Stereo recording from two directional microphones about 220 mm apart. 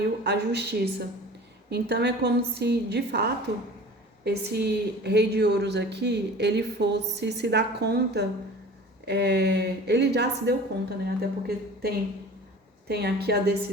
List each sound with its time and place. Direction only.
0.3 s a woman's voice: 50° right (ahead or behind)